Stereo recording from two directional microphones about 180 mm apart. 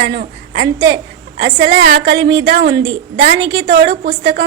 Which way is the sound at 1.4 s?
80° right.